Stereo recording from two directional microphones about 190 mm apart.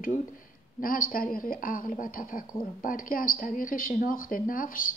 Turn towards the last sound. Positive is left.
turn(degrees=45)  # may be behind; listen again after turning